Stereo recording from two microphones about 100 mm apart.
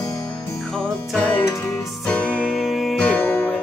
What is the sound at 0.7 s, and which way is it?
Music, 5° left (ahead or behind).